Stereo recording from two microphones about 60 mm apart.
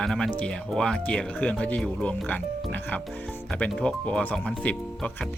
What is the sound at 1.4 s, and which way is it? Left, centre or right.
Speech, left.